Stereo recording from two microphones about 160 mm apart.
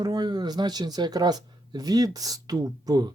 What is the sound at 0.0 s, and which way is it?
Speech, 25° right (ahead or behind).